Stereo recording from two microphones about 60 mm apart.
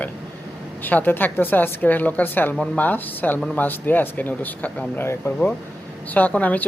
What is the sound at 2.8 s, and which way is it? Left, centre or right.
Speech, left.